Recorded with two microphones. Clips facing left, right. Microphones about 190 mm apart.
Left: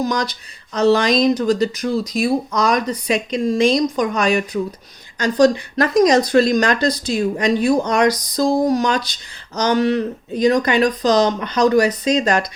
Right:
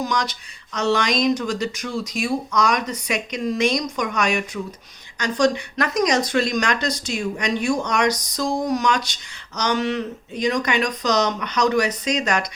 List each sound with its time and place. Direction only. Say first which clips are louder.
0.0 s speech: left 4 dB; 35° left (ahead or behind)